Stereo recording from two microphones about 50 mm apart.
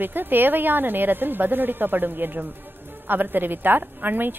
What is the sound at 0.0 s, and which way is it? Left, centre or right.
Speech, right.